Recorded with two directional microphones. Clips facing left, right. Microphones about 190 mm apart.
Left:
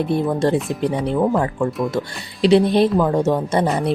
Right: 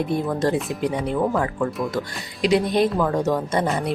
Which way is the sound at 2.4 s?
30° left (ahead or behind).